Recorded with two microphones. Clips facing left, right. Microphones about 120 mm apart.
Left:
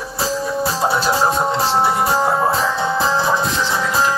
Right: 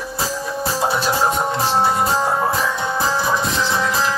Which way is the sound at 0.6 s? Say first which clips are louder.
Even; 25° left (ahead or behind).